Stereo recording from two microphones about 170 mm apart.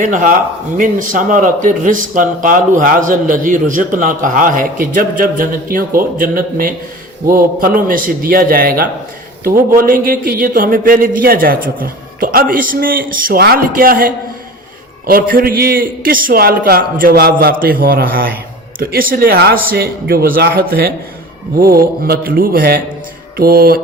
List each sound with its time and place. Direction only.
0.0 s a man's voice: 50° right (ahead or behind)